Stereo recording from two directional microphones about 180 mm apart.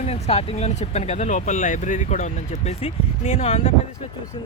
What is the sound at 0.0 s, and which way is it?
Speech, 35° left (ahead or behind).